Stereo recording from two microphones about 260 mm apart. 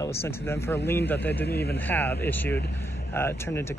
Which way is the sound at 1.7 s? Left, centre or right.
Centre.